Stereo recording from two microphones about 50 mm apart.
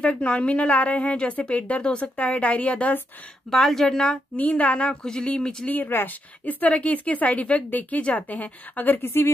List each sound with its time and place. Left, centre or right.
0.0 s a woman's voice: left
3.4 s speech: centre
4.4 s a woman's voice: left
5.9 s speech: left
6.4 s speech: left